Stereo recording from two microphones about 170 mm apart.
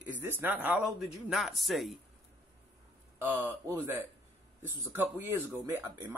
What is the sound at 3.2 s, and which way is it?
A man's voice, 10° right (ahead or behind).